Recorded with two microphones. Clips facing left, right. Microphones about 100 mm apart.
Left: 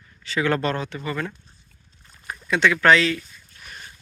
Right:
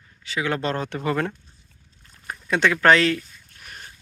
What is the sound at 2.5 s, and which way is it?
Speech, 50° right (ahead or behind).